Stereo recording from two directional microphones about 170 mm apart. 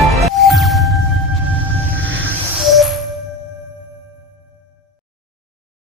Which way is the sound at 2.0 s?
90° right.